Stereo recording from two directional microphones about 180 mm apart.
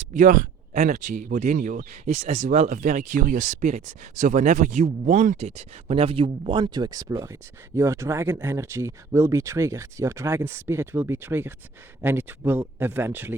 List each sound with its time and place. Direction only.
0.0 s speech: 45° right (ahead or behind); by 13.3 s 10° right (ahead or behind)